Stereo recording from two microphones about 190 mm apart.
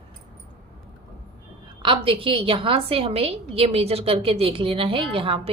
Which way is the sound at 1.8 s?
25° right (ahead or behind).